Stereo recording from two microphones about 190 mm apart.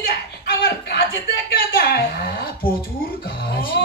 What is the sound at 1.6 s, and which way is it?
Speech, 50° left (ahead or behind).